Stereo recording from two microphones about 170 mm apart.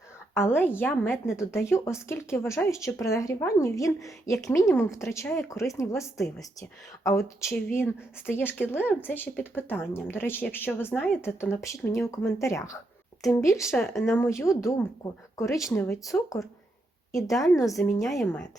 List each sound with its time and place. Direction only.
0.3 s a woman's voice: 15° left (ahead or behind)
13.7 s speech: centre (ahead or behind)
14.2 s a woman's voice: 15° left (ahead or behind)